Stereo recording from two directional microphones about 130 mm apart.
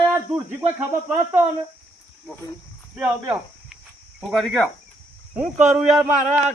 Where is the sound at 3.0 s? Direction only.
10° right (ahead or behind).